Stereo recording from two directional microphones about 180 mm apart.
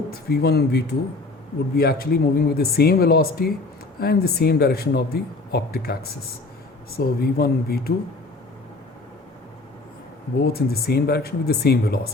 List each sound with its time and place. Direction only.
0.1 s speech: 60° left (ahead or behind)
10.4 s speech: 60° left (ahead or behind)